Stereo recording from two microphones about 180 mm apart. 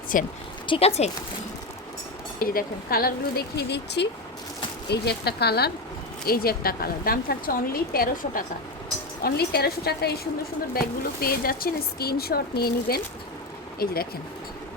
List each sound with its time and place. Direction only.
0.1 s speech: 50° left (ahead or behind)
0.7 s speech: 35° left (ahead or behind)
2.4 s a woman's voice: 55° left (ahead or behind)
9.2 s a woman's voice: 60° left (ahead or behind)